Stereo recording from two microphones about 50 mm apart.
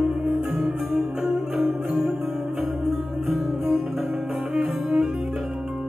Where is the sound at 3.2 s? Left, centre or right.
Centre.